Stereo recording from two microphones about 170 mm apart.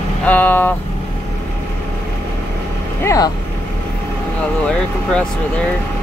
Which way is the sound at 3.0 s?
20° left (ahead or behind).